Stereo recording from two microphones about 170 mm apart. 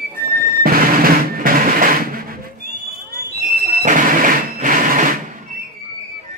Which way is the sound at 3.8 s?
50° right (ahead or behind).